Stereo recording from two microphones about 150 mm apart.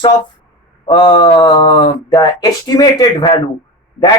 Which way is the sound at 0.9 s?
30° left (ahead or behind).